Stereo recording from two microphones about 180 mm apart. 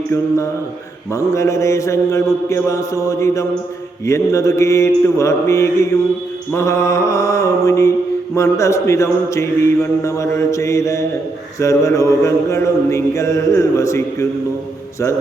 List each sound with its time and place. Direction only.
1.1 s mantra: 15° left (ahead or behind)